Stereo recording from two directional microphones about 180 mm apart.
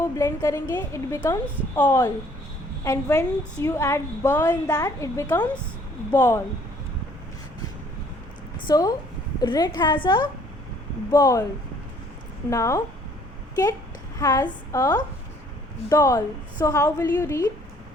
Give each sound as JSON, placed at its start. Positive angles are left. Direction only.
{"t": 0.0, "sound": "a woman's voice", "side_deg": 15}
{"t": 8.6, "sound": "a woman's voice", "side_deg": 20}
{"t": 11.1, "sound": "a woman's voice", "side_deg": 15}
{"t": 12.5, "sound": "a woman's voice", "side_deg": 15}
{"t": 14.2, "sound": "a woman's voice", "side_deg": 20}